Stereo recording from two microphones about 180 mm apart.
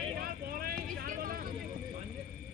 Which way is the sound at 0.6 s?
55° right (ahead or behind).